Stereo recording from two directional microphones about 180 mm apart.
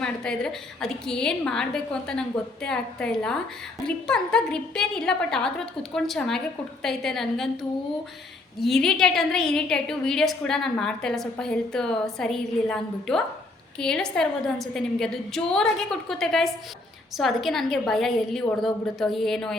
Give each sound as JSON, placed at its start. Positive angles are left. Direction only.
{"t": 0.0, "sound": "a woman's voice", "side_deg": 5}
{"t": 8.6, "sound": "a woman's voice", "side_deg": 0}